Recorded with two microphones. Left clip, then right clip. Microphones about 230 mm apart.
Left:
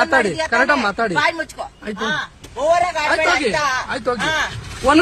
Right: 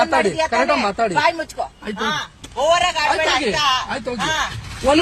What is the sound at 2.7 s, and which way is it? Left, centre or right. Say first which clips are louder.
Speech: left 1 dB; centre.